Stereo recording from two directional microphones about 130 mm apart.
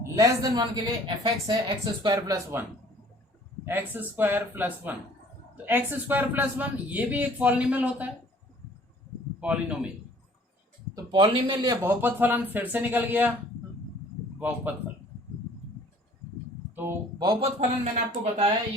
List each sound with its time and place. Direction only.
0.2 s speech: 30° right (ahead or behind)
3.7 s speech: 15° right (ahead or behind)
9.4 s speech: 10° right (ahead or behind)
11.1 s speech: 40° right (ahead or behind)
11.8 s speech: 15° right (ahead or behind)
14.3 s a man's voice: 15° right (ahead or behind)
16.7 s speech: 15° right (ahead or behind)
17.4 s speech: 60° right (ahead or behind)